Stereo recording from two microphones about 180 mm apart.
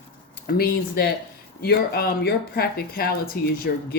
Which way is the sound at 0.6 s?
60° left (ahead or behind).